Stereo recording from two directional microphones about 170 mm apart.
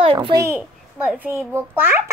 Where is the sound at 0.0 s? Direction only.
30° right (ahead or behind).